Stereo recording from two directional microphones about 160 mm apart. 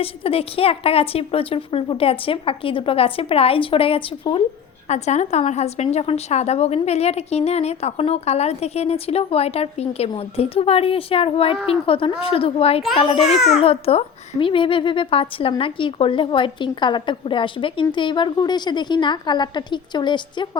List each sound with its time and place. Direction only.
0.0 s a woman's voice: 35° left (ahead or behind)
4.9 s a woman's voice: 45° left (ahead or behind)
13.3 s a child's voice: centre (ahead or behind)
13.6 s a woman's voice: 40° left (ahead or behind)